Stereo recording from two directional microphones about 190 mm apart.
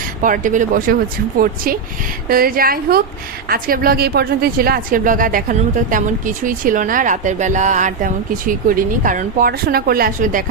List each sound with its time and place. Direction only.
0.2 s a woman's voice: 45° right (ahead or behind)